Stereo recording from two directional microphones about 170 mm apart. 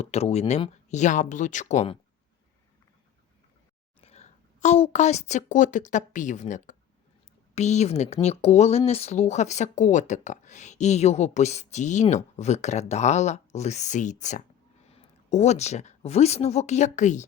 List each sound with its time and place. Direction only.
0.0 s speech: 40° left (ahead or behind)
4.0 s a woman's voice: 40° left (ahead or behind)